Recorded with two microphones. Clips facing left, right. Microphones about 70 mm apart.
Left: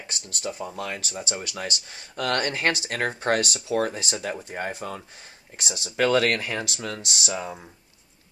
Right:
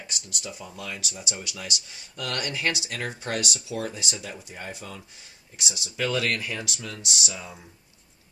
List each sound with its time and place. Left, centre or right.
0.0 s speech: left